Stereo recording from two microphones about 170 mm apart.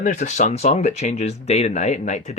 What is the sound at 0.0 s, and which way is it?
Speech, 45° left (ahead or behind).